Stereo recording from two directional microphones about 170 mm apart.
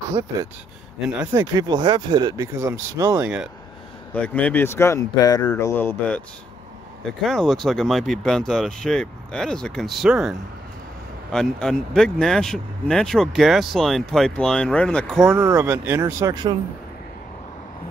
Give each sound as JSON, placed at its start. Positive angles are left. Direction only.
{"t": 1.3, "sound": "speech", "side_deg": -25}
{"t": 3.2, "sound": "speech", "side_deg": -5}
{"t": 4.1, "sound": "speech", "side_deg": 10}
{"t": 11.3, "sound": "speech", "side_deg": 5}